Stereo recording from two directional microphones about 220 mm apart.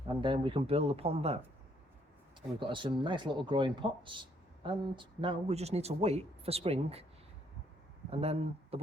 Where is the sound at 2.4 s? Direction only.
20° right (ahead or behind).